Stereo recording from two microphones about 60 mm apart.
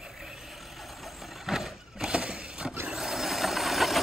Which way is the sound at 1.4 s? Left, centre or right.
Centre.